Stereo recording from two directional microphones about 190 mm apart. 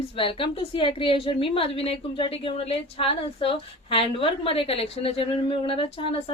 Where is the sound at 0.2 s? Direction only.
25° left (ahead or behind).